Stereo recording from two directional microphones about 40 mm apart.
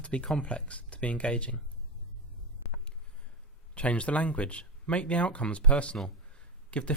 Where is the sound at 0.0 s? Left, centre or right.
Left.